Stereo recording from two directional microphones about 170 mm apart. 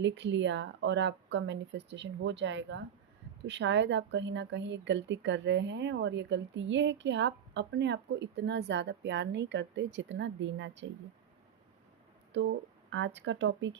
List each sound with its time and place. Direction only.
0.0 s speech: 90° right
12.9 s speech: 90° right